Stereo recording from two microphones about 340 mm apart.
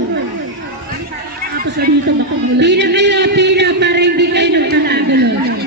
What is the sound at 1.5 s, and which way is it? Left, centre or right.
A man's voice, right.